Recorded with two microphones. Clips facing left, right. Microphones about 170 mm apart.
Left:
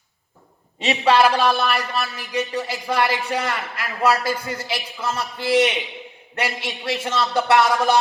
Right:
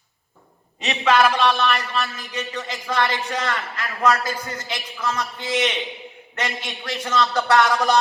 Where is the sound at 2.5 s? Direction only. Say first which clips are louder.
Left 4 dB; 35° left (ahead or behind).